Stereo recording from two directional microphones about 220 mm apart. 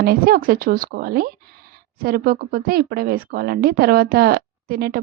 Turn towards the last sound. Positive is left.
turn(degrees=-45)  # may be behind; listen again after turning